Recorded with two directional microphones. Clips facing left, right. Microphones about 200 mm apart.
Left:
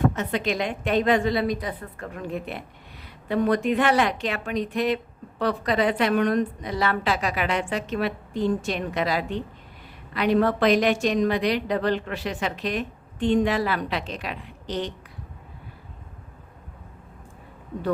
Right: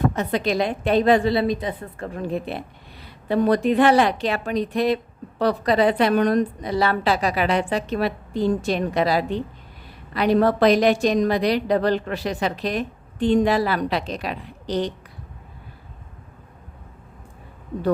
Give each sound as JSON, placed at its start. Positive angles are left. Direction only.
{"t": 0.2, "sound": "a woman's voice", "side_deg": -35}